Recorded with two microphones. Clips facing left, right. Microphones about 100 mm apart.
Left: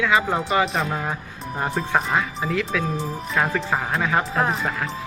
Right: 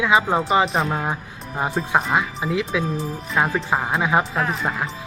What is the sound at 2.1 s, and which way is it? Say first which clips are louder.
Speech: right 1 dB; 15° right (ahead or behind).